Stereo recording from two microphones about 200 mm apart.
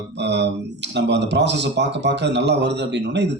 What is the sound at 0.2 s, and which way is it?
Speech, 60° right (ahead or behind).